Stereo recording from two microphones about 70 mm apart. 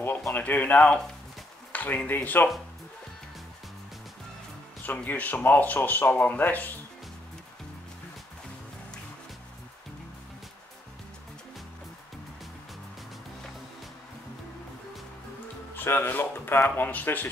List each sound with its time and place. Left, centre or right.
0.3 s a man's voice: left
4.8 s speech: left
15.7 s speech: left